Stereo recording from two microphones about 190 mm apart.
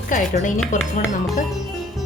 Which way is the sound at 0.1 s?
45° left (ahead or behind).